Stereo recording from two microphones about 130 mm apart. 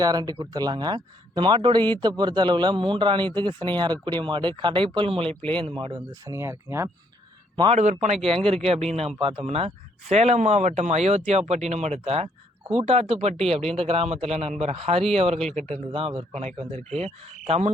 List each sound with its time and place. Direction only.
0.0 s speech: 30° right (ahead or behind)
5.3 s speech: 10° left (ahead or behind)
5.7 s speech: 40° right (ahead or behind)
6.1 s speech: 25° right (ahead or behind)
7.5 s speech: 40° right (ahead or behind)
8.6 s speech: 55° right (ahead or behind)